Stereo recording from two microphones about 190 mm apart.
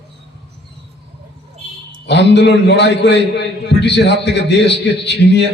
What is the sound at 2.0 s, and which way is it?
A man's voice, 65° left (ahead or behind).